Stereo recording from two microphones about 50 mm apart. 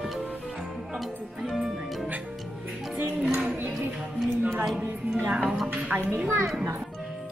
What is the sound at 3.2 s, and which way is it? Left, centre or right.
Music, right.